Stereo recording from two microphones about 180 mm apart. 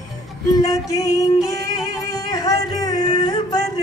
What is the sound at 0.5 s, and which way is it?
Music, 20° left (ahead or behind).